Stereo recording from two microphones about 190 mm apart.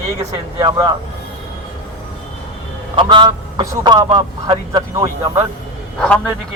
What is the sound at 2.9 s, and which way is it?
Speech, 25° right (ahead or behind).